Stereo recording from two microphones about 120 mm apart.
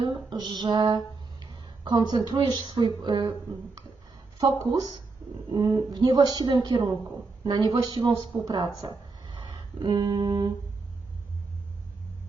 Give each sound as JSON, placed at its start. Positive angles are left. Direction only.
{"t": 0.0, "sound": "a sound", "side_deg": -40}
{"t": 2.6, "sound": "speech", "side_deg": -35}
{"t": 4.7, "sound": "speech", "side_deg": -35}